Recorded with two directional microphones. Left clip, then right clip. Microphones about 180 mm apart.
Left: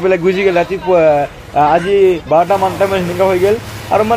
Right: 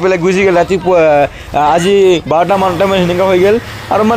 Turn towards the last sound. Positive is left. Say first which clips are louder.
# right 2 dB
turn(degrees=-55)  # may be behind; listen again after turning